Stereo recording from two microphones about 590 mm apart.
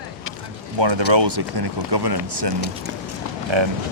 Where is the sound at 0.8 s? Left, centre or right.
Right.